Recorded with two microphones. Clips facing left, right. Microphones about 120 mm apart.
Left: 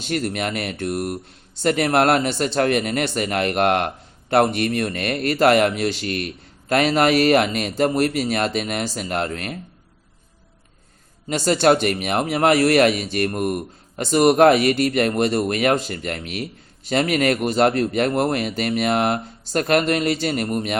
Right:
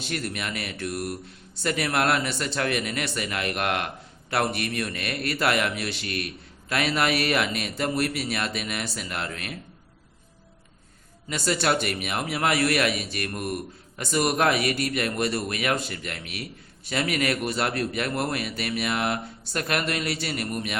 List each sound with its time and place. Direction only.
0.3 s a man's voice: 50° left (ahead or behind)
2.2 s speech: 30° left (ahead or behind)
2.6 s a man's voice: 45° left (ahead or behind)
11.3 s a man's voice: 35° left (ahead or behind)
13.3 s speech: 25° left (ahead or behind)
14.2 s a man's voice: 45° left (ahead or behind)